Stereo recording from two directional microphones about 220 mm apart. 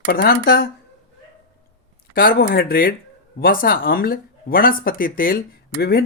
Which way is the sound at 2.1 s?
40° left (ahead or behind).